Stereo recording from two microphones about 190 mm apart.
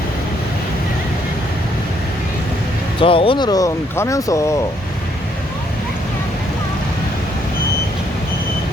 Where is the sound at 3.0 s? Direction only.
30° left (ahead or behind).